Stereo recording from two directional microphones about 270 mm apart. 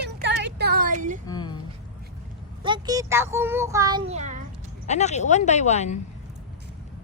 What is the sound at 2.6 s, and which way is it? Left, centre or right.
A child's voice, centre.